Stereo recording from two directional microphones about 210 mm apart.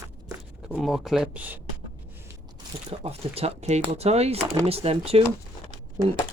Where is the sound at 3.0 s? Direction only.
30° right (ahead or behind).